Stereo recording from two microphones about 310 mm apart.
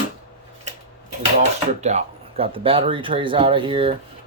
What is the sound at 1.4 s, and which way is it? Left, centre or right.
Speech, right.